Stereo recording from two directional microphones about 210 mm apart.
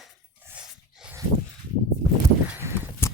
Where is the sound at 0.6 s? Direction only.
5° right (ahead or behind).